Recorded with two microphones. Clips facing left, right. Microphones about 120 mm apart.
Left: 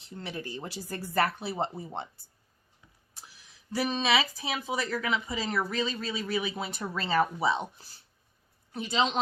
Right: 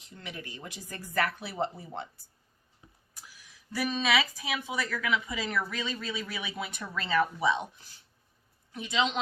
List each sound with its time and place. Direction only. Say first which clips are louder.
0.0 s speech: left 5 dB; 30° left (ahead or behind)